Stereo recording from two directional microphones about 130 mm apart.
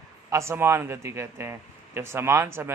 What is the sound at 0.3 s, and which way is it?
A man's voice, 20° right (ahead or behind).